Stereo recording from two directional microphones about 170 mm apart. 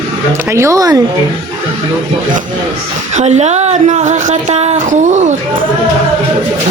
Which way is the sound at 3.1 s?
40° right (ahead or behind).